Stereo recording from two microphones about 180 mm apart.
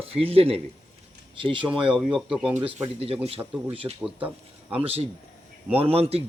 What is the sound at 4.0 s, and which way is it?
Speech, 5° right (ahead or behind).